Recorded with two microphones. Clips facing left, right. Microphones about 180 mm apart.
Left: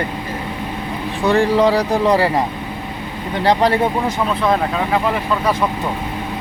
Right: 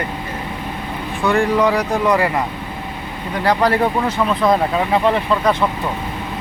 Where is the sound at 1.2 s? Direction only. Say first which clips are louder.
Left 2 dB; 35° left (ahead or behind).